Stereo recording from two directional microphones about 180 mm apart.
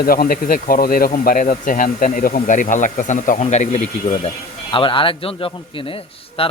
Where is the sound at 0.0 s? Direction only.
55° left (ahead or behind).